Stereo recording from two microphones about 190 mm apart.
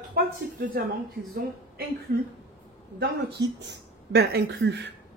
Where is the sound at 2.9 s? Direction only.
65° right (ahead or behind).